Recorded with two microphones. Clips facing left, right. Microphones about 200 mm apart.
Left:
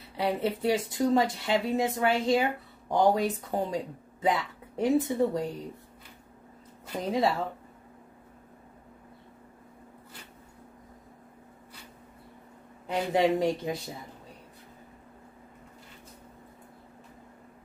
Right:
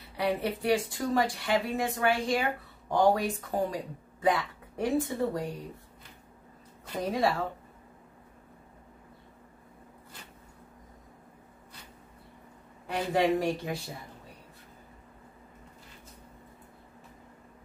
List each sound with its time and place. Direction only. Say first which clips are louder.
0.2 s speech: left 2 dB; 25° left (ahead or behind)
7.0 s speech: left 1 dB; 25° left (ahead or behind)
12.8 s speech: left 2 dB; 20° left (ahead or behind)